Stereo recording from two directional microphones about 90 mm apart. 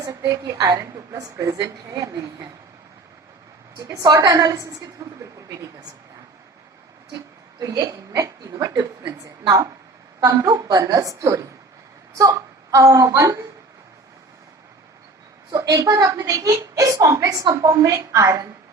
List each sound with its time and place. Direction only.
0.2 s a woman's voice: 40° right (ahead or behind)
3.8 s a woman's voice: 45° right (ahead or behind)
7.6 s a woman's voice: 40° right (ahead or behind)
15.5 s a woman's voice: 40° right (ahead or behind)